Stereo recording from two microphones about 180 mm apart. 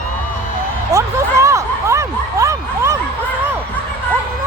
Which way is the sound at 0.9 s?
15° right (ahead or behind).